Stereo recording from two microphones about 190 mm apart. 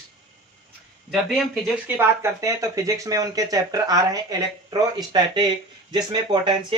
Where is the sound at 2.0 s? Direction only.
15° right (ahead or behind).